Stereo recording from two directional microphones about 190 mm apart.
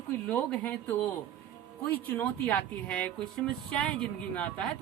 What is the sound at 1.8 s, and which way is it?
A woman's voice, 10° left (ahead or behind).